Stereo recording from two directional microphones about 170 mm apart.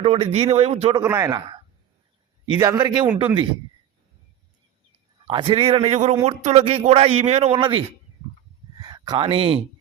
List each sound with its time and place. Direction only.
0.0 s speech: 35° right (ahead or behind)
1.0 s a man's voice: 20° right (ahead or behind)
2.5 s a man's voice: 25° right (ahead or behind)
5.2 s speech: 30° right (ahead or behind)
8.8 s a sound: 25° right (ahead or behind)